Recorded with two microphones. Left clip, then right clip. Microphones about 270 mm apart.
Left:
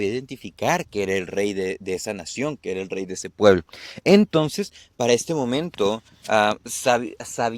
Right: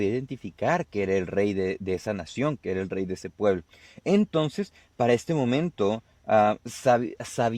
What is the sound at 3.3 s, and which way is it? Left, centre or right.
Speech, centre.